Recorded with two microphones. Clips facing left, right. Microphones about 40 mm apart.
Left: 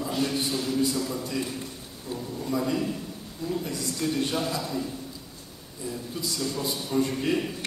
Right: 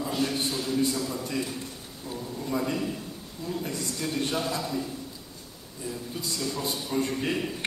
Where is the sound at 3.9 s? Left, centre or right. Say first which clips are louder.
Left 3 dB; centre.